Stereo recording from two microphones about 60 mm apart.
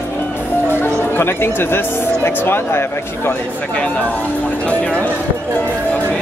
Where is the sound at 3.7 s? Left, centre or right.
Left.